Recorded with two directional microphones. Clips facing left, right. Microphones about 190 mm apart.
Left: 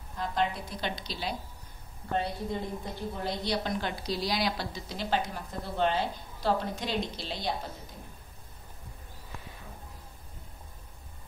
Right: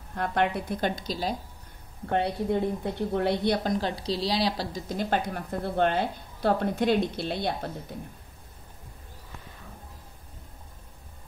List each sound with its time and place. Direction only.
0.1 s speech: 65° right (ahead or behind); by 1.3 s 45° right (ahead or behind)
2.0 s a woman's voice: 65° right (ahead or behind); by 4.8 s 35° right (ahead or behind)
4.8 s speech: 50° right (ahead or behind)